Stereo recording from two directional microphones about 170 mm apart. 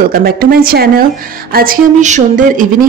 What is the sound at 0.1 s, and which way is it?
A woman's voice, 60° right (ahead or behind).